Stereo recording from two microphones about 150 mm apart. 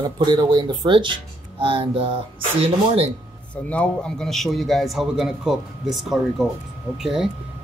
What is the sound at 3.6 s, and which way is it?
A man's voice, 5° left (ahead or behind).